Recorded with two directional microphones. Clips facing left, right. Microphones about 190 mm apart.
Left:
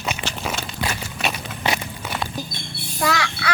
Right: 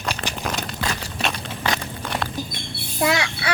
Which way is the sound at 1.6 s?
10° left (ahead or behind).